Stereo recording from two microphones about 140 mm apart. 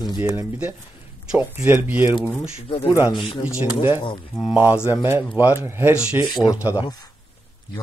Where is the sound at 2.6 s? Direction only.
40° left (ahead or behind).